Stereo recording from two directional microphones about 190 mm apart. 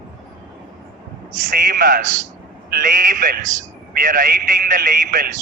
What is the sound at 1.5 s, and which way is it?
A man's voice, 50° right (ahead or behind).